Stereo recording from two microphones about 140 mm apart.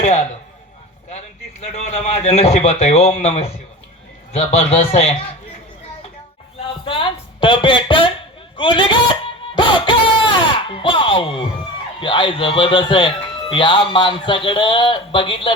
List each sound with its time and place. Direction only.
0.0 s a man's voice: 50° left (ahead or behind)
1.6 s a man's voice: 50° left (ahead or behind)
4.9 s a man's voice: 45° left (ahead or behind)
6.8 s a man's voice: 35° left (ahead or behind)
9.6 s a sound: 35° left (ahead or behind)
11.9 s a man's voice: 35° left (ahead or behind)